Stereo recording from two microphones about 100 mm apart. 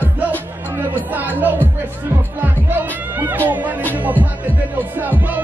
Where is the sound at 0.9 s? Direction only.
20° right (ahead or behind).